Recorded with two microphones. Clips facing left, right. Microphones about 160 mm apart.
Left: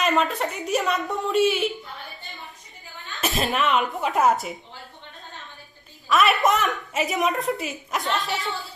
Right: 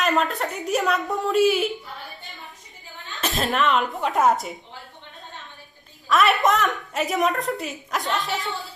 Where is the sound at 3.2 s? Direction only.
5° left (ahead or behind).